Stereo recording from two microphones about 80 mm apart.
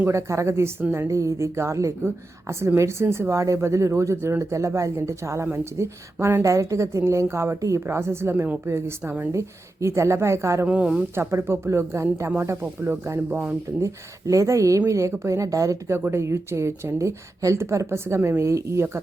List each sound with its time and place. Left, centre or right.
0.1 s a woman's voice: right
1.0 s a woman's voice: right
10.7 s speech: centre
11.1 s a woman's voice: right
13.3 s speech: centre
13.8 s a woman's voice: right